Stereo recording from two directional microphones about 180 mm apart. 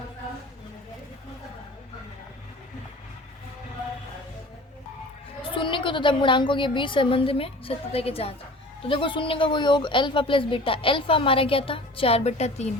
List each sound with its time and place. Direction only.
5.4 s a woman's voice: 30° left (ahead or behind)